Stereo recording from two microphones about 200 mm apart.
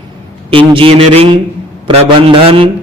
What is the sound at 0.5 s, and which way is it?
A man's voice, 25° right (ahead or behind).